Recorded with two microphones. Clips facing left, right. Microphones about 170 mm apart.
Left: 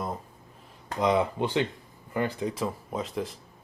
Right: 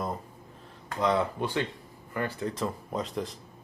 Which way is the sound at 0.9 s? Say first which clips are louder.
Left 2 dB; 15° left (ahead or behind).